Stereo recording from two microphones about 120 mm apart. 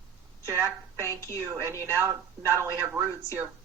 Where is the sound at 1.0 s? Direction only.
25° left (ahead or behind).